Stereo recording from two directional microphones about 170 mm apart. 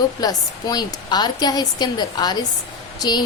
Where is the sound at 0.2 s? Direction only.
25° left (ahead or behind).